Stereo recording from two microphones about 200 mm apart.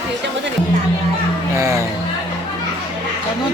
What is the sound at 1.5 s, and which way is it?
Speech, 15° right (ahead or behind).